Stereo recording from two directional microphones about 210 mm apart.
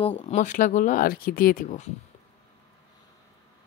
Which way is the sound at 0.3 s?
35° left (ahead or behind).